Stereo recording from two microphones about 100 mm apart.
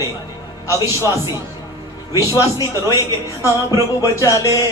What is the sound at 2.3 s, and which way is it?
Speech, 35° left (ahead or behind).